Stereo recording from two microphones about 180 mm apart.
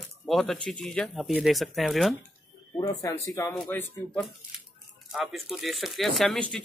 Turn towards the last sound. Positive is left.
turn(degrees=5)  # may be behind; listen again after turning